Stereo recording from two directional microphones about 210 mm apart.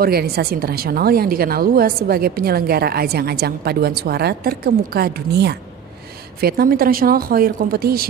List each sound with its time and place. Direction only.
0.0 s a woman's voice: 50° right (ahead or behind)